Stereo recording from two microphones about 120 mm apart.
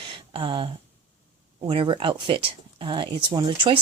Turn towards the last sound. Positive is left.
turn(degrees=-40)  # may be behind; listen again after turning